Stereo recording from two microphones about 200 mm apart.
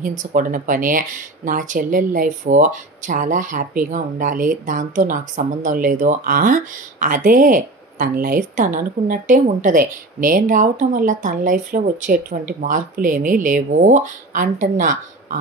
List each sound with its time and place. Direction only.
0.2 s speech: 40° right (ahead or behind)